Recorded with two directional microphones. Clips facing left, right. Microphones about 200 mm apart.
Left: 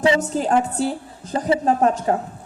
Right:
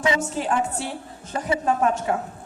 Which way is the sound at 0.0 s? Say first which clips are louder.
Left 5 dB; 35° left (ahead or behind).